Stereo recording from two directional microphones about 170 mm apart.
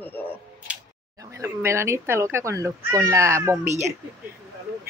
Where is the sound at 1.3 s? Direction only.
15° right (ahead or behind).